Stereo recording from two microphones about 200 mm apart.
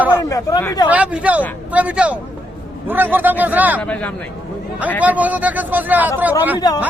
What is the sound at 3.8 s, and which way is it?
Speech, 5° left (ahead or behind).